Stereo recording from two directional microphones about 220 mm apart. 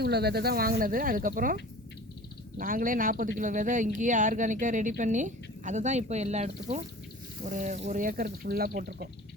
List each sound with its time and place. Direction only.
0.0 s speech: 45° right (ahead or behind)
2.6 s speech: 40° right (ahead or behind)